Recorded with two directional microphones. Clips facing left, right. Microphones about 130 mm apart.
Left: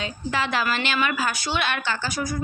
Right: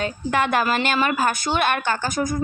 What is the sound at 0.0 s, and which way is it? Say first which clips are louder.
A woman's voice: right 5 dB; 55° right (ahead or behind).